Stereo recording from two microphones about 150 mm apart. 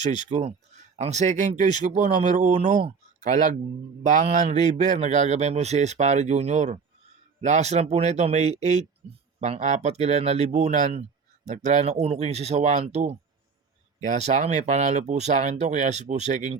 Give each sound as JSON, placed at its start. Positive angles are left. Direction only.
{"t": 0.0, "sound": "speech", "side_deg": 30}
{"t": 0.3, "sound": "a man's voice", "side_deg": -50}